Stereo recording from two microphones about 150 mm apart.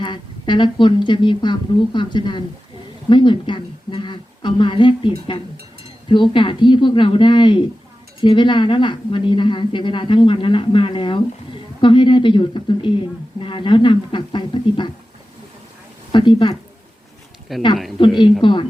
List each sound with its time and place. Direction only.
0.0 s a woman's voice: 30° left (ahead or behind)
16.1 s a woman's voice: 30° left (ahead or behind)
17.5 s speech: centre (ahead or behind)
18.4 s a woman's voice: 35° left (ahead or behind)